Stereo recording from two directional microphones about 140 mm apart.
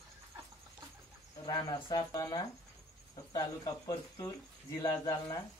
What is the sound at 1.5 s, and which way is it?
Speech, 30° left (ahead or behind).